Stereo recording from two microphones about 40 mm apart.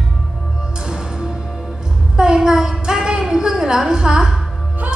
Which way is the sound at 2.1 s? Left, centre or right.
Centre.